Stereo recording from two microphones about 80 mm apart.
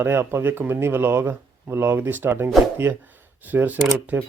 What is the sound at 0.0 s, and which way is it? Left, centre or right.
Speech, right.